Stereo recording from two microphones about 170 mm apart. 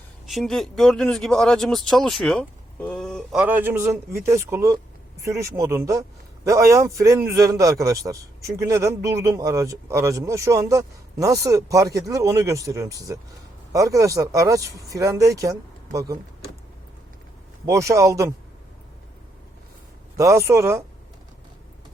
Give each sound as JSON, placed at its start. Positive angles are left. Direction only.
{"t": 0.3, "sound": "speech", "side_deg": 0}
{"t": 3.4, "sound": "a man's voice", "side_deg": -10}
{"t": 17.7, "sound": "speech", "side_deg": -20}
{"t": 20.1, "sound": "speech", "side_deg": -20}